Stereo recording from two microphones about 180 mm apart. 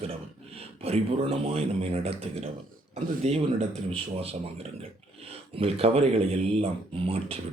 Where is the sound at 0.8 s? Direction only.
35° right (ahead or behind).